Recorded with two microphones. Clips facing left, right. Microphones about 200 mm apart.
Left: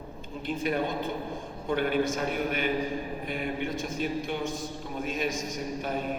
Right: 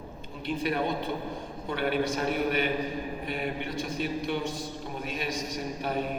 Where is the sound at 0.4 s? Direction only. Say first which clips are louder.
Even; 50° left (ahead or behind).